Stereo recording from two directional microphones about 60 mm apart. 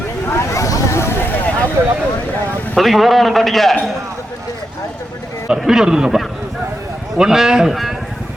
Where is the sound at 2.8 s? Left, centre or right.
Centre.